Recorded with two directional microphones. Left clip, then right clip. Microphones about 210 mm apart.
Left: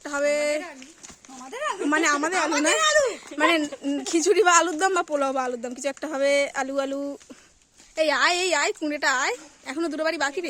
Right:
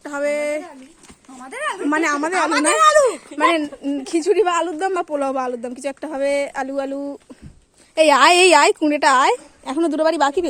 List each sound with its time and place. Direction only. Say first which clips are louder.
0.0 s a sound: right 2 dB; centre (ahead or behind)
1.5 s a sound: right 4 dB; 25° right (ahead or behind)
1.8 s a woman's voice: right 2 dB; 5° right (ahead or behind)
2.5 s speech: right 8 dB; 30° right (ahead or behind)
3.3 s speech: even; centre (ahead or behind)
7.9 s speech: right 10 dB; 30° right (ahead or behind)